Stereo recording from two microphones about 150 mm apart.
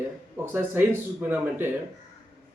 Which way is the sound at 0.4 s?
15° right (ahead or behind).